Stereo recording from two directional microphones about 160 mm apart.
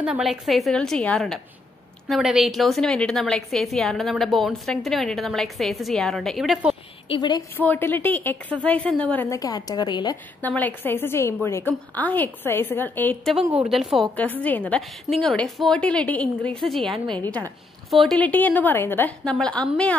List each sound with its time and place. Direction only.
0.0 s a woman's voice: 5° right (ahead or behind)
7.1 s a woman's voice: 25° left (ahead or behind)
7.5 s a woman's voice: 10° left (ahead or behind)
10.4 s a woman's voice: 10° left (ahead or behind)